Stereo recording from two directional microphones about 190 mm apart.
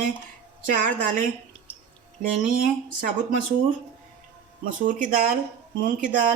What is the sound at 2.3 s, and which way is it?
Speech, 45° right (ahead or behind).